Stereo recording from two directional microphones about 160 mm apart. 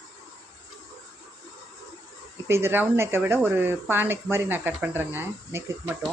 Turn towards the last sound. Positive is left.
turn(degrees=-10)  # may be behind; listen again after turning